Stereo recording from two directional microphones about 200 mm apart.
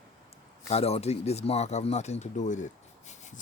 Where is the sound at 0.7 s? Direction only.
30° left (ahead or behind).